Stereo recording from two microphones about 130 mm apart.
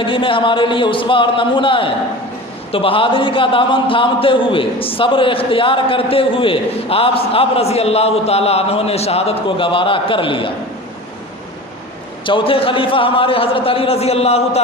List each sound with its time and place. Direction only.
0.0 s a man's voice: 40° left (ahead or behind)
12.2 s a man's voice: 40° left (ahead or behind)